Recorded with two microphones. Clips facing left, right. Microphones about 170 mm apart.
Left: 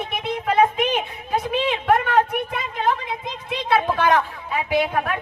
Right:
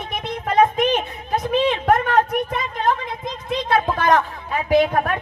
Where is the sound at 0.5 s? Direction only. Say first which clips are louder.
Right 3 dB; 40° right (ahead or behind).